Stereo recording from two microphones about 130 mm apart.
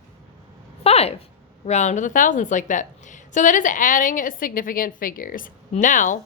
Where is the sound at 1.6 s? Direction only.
65° left (ahead or behind); by 6.2 s 80° left.